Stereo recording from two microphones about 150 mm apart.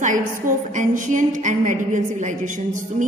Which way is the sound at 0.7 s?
60° right (ahead or behind).